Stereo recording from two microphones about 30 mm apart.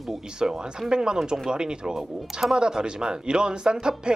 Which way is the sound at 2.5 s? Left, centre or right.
Right.